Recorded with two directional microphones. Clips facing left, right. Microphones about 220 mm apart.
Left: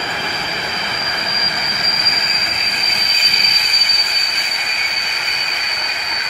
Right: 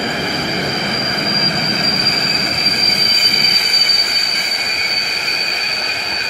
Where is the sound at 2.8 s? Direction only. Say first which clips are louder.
Right 6 dB; 50° right (ahead or behind).